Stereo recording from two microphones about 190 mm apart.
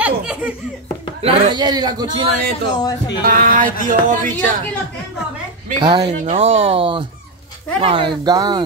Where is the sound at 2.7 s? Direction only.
20° left (ahead or behind).